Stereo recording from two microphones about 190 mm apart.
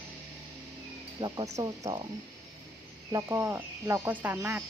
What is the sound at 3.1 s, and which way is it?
Speech, 15° right (ahead or behind).